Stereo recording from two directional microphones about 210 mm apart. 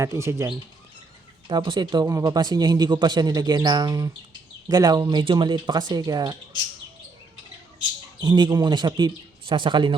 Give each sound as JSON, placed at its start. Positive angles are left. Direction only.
{"t": 0.0, "sound": "a man's voice", "side_deg": -15}
{"t": 8.2, "sound": "a man's voice", "side_deg": -20}